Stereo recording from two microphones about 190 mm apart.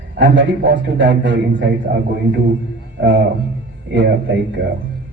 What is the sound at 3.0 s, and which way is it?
Speech, 70° right (ahead or behind).